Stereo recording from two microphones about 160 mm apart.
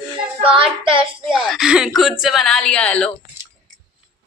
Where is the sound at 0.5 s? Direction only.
35° right (ahead or behind).